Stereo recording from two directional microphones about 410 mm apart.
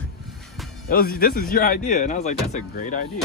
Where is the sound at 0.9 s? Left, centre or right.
Left.